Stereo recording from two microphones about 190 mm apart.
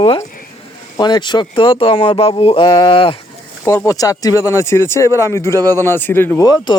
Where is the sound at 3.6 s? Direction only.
15° left (ahead or behind).